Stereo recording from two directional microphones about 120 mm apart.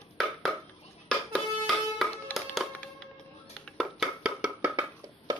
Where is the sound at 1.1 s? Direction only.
5° left (ahead or behind).